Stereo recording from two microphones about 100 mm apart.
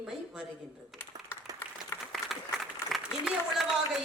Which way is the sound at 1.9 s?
30° left (ahead or behind).